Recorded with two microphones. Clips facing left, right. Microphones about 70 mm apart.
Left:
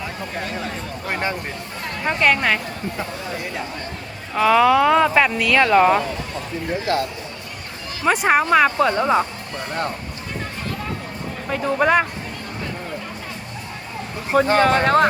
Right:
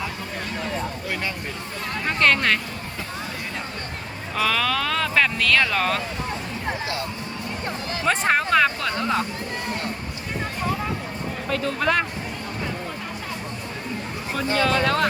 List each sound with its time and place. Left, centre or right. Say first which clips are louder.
1.0 s speech: left 4 dB; left
2.0 s speech: left 2 dB; centre
4.4 s speech: left 9 dB; centre
8.0 s speech: left 4 dB; centre
11.4 s speech: left 5 dB; centre
14.3 s speech: left 7 dB; left